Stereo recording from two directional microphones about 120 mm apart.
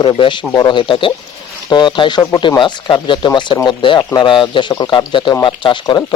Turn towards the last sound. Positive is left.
turn(degrees=40)  # may be behind; listen again after turning